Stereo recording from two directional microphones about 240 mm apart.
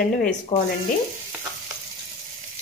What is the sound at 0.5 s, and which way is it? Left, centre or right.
Speech, left.